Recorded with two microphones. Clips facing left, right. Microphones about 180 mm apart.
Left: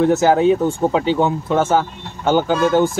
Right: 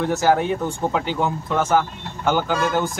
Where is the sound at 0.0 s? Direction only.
20° left (ahead or behind).